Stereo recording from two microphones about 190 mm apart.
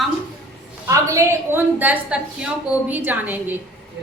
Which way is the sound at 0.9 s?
15° right (ahead or behind).